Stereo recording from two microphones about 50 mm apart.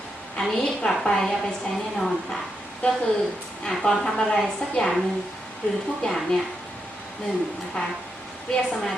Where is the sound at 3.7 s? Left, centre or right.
Centre.